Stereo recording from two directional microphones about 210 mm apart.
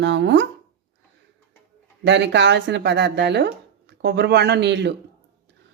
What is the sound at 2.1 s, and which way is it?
Speech, 55° right (ahead or behind).